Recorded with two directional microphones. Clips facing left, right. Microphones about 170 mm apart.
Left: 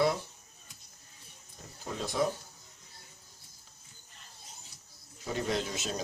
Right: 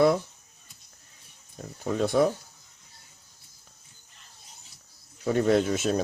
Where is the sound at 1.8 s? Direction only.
60° right (ahead or behind).